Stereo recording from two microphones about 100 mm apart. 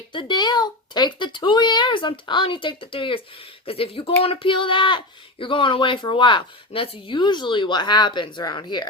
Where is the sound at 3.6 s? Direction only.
70° left (ahead or behind); by 8.8 s 50° left (ahead or behind).